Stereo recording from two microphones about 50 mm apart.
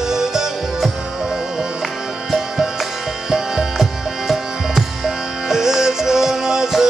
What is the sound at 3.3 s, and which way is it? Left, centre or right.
Music, centre.